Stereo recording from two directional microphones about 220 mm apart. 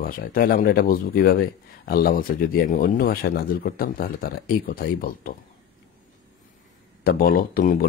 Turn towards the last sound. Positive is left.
turn(degrees=40)  # may be behind; listen again after turning